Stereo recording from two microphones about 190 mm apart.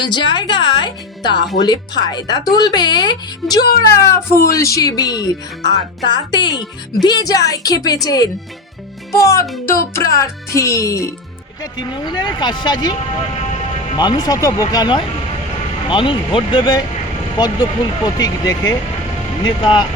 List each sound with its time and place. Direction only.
0.0 s speech: 25° left (ahead or behind)